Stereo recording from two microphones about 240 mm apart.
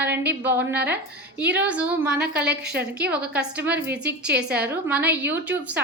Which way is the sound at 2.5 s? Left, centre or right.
Right.